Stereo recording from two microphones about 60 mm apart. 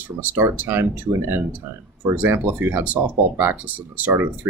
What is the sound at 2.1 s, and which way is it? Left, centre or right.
Speech, right.